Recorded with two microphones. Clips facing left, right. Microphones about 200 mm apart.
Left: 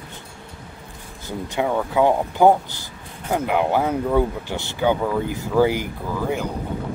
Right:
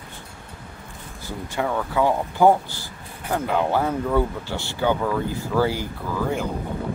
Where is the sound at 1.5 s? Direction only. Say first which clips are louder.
Left 3 dB; 15° left (ahead or behind).